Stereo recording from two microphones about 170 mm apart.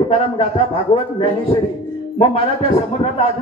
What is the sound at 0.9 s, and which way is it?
Speech, 35° left (ahead or behind).